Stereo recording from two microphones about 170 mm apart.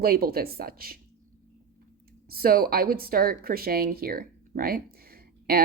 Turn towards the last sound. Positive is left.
turn(degrees=-60)  # may be behind; listen again after turning